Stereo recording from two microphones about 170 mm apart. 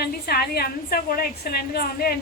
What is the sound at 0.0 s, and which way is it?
A woman's voice, 65° left (ahead or behind).